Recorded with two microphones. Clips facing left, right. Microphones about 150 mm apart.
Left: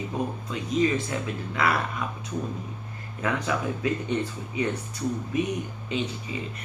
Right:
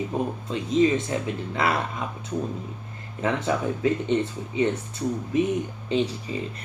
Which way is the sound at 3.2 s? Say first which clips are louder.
Right 3 dB; 25° right (ahead or behind).